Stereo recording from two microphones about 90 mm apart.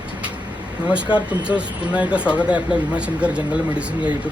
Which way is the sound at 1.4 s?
15° right (ahead or behind).